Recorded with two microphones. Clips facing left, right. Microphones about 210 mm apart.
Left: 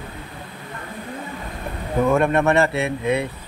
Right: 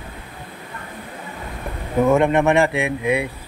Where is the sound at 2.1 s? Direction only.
20° right (ahead or behind).